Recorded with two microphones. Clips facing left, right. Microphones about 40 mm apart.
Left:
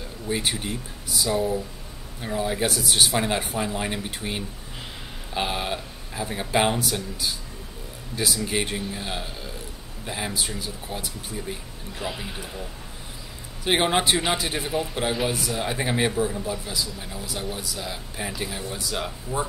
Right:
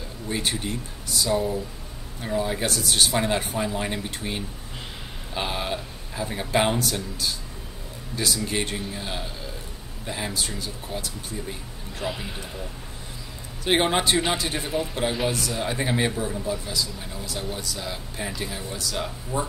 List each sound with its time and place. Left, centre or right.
0.3 s speech: centre
13.7 s speech: centre
18.7 s speech: centre